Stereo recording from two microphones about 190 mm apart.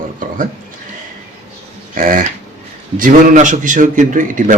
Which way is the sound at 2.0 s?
45° right (ahead or behind).